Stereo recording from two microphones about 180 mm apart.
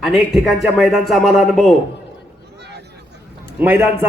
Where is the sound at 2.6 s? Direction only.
65° right (ahead or behind).